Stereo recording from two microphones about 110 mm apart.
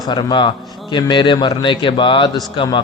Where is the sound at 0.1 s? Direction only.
40° left (ahead or behind).